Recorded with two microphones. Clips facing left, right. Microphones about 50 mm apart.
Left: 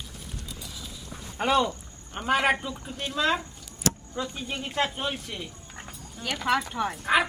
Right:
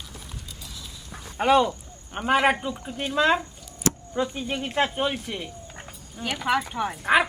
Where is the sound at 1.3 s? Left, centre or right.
Centre.